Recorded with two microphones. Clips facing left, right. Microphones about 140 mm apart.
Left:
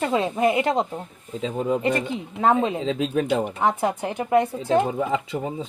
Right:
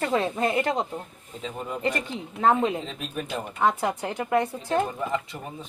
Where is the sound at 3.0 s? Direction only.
90° left.